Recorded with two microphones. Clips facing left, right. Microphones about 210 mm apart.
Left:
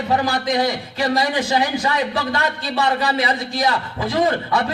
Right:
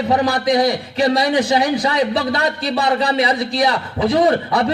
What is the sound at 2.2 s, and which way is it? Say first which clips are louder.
Speech: right 3 dB; 35° right (ahead or behind).